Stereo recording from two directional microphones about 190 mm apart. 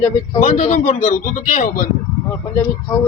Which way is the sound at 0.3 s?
40° left (ahead or behind).